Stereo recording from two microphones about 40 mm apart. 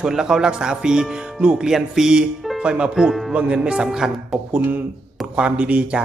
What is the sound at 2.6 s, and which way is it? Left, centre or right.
Speech, right.